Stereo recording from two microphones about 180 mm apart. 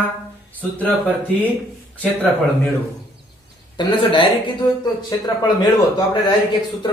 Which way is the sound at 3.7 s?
25° left (ahead or behind).